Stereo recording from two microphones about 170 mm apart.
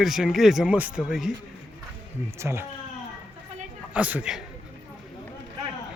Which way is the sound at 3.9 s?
5° right (ahead or behind).